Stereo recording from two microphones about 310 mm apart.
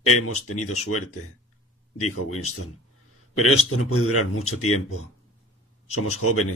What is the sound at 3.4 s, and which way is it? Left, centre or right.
A man's voice, left.